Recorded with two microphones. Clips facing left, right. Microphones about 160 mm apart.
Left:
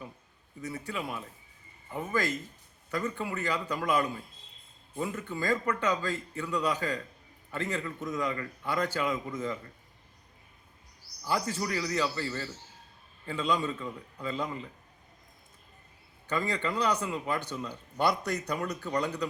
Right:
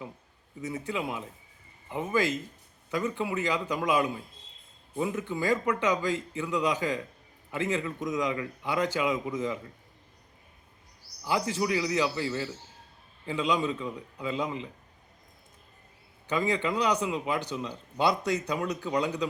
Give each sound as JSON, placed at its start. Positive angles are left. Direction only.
{"t": 0.6, "sound": "a man's voice", "side_deg": -20}
{"t": 11.2, "sound": "a man's voice", "side_deg": -15}
{"t": 16.3, "sound": "a man's voice", "side_deg": -10}